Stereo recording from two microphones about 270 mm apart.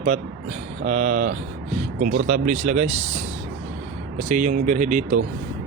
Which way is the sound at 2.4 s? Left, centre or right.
Right.